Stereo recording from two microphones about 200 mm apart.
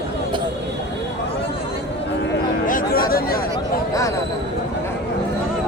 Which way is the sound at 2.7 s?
45° left (ahead or behind).